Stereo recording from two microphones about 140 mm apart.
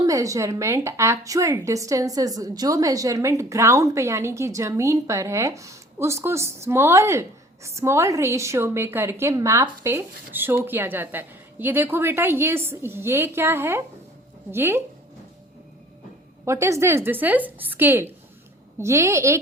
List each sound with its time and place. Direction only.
0.0 s a woman's voice: 25° right (ahead or behind)
16.5 s a woman's voice: 20° right (ahead or behind)